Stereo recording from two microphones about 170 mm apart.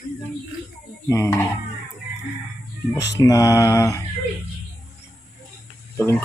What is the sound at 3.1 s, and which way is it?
Mantra, 20° left (ahead or behind).